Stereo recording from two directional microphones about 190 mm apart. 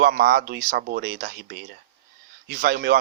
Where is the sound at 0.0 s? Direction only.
55° right (ahead or behind).